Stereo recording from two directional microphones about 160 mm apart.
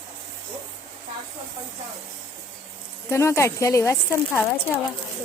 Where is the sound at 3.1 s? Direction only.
15° left (ahead or behind).